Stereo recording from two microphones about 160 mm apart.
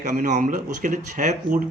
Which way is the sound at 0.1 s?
55° right (ahead or behind).